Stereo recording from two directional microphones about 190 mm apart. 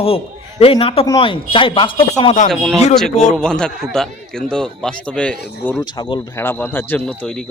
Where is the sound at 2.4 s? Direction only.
Centre (ahead or behind).